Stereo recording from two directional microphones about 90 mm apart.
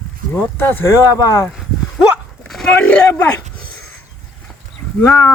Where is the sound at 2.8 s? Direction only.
15° left (ahead or behind).